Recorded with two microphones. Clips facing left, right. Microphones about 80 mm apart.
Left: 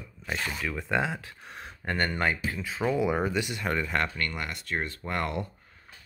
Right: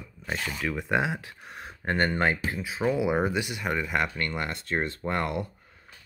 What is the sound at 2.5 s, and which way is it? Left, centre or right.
Speech, centre.